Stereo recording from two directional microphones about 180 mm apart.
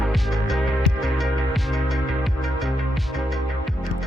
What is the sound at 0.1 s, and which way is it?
Music, centre (ahead or behind).